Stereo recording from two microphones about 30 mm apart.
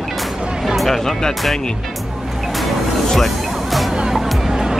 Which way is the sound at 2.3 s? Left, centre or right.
Centre.